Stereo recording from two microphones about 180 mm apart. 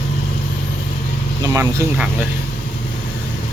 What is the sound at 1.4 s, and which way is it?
Vehicle, 15° right (ahead or behind).